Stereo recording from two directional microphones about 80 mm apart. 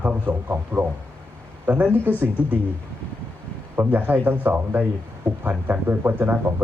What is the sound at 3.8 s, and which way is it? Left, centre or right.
Speech, right.